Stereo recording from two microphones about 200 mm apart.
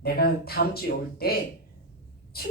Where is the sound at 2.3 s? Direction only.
50° left (ahead or behind).